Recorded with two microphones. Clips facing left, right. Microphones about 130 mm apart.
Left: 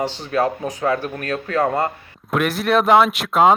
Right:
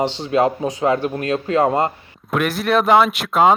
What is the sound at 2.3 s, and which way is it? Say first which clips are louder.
Speech: even; centre (ahead or behind).